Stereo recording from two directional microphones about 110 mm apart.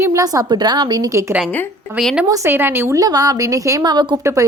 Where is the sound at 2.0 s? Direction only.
Centre (ahead or behind).